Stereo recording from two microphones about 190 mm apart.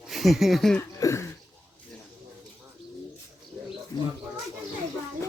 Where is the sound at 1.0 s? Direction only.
15° left (ahead or behind).